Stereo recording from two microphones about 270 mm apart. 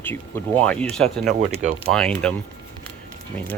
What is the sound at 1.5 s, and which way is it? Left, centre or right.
Speech, right.